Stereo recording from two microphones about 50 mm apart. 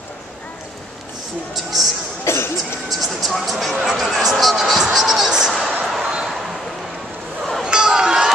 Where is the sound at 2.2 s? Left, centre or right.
Left.